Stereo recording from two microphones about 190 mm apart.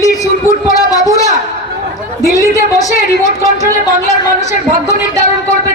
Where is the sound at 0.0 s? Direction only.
15° left (ahead or behind).